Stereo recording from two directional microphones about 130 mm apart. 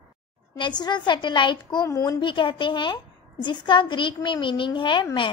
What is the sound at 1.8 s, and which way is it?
Speech, 25° left (ahead or behind).